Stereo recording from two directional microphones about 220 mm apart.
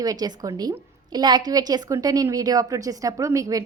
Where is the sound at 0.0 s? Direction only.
15° right (ahead or behind).